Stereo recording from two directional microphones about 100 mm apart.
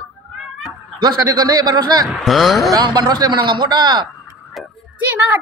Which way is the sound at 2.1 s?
Centre (ahead or behind).